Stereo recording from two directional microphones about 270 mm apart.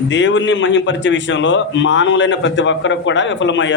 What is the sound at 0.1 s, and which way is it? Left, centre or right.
A man's voice, left.